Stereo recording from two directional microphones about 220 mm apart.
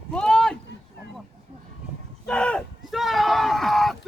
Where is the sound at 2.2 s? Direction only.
5° left (ahead or behind).